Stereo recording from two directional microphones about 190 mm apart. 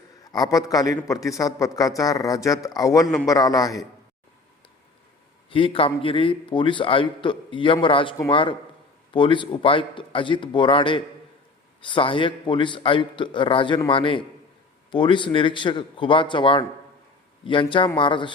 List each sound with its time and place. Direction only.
0.3 s a man's voice: 20° left (ahead or behind)
5.5 s a man's voice: 30° left (ahead or behind)